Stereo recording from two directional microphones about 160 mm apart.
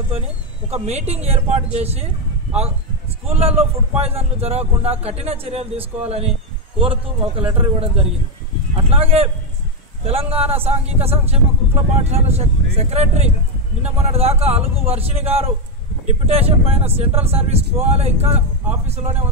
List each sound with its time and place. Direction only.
0.7 s a man's voice: 40° right (ahead or behind)
3.3 s a man's voice: 40° right (ahead or behind)